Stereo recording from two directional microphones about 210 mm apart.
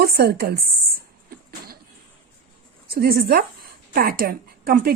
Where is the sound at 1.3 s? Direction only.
45° right (ahead or behind).